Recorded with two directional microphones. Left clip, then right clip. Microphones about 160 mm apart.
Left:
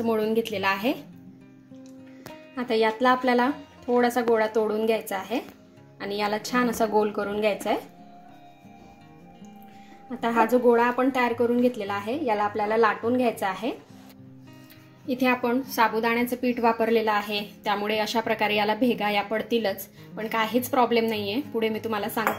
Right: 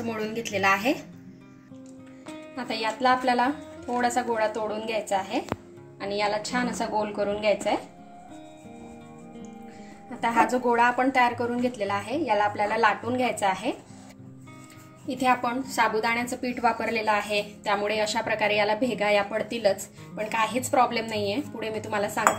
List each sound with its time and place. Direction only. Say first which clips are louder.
0.0 s a woman's voice: left 6 dB; 30° left (ahead or behind)
2.5 s a woman's voice: left 6 dB; 35° left (ahead or behind)
10.2 s speech: left 2 dB; 30° left (ahead or behind)
15.0 s a woman's voice: even; 30° left (ahead or behind)